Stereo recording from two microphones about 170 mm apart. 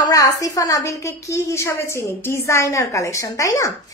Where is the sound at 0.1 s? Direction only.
20° left (ahead or behind).